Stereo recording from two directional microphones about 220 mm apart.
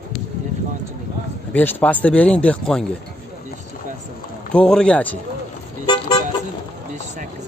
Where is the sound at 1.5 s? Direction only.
10° left (ahead or behind).